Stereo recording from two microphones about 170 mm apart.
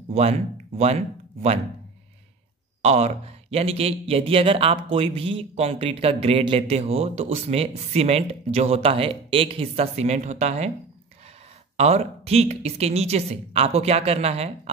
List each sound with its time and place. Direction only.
0.1 s speech: 35° right (ahead or behind)
2.8 s speech: 40° right (ahead or behind)
11.7 s speech: 40° right (ahead or behind)